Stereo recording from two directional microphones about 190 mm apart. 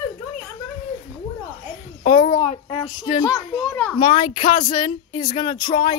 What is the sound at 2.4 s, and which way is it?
Child singing, 35° left (ahead or behind).